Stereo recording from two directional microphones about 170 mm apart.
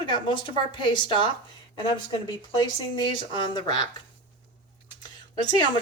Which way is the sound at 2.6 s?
25° left (ahead or behind).